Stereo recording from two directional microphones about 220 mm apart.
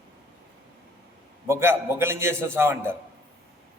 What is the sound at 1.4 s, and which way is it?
A man's voice, 10° right (ahead or behind).